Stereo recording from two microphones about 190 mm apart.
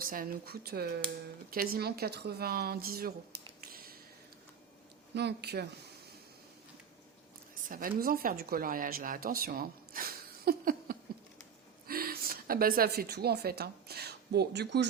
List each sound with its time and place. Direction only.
0.0 s a woman's voice: 50° right (ahead or behind)
3.7 s a sound: 50° right (ahead or behind)
5.1 s speech: 60° right (ahead or behind)
7.5 s a woman's voice: 45° right (ahead or behind); by 14.8 s 65° right (ahead or behind)